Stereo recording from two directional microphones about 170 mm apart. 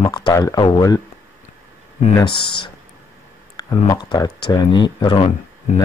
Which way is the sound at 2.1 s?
30° left (ahead or behind).